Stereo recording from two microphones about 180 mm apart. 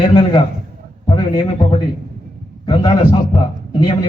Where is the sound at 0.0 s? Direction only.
25° left (ahead or behind).